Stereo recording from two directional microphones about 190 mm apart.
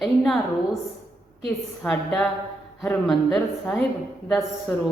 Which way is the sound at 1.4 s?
Centre (ahead or behind).